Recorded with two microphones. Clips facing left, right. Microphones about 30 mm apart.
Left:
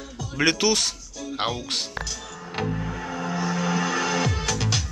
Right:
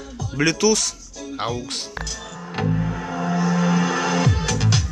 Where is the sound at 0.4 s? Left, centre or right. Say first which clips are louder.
Right 3 dB; left.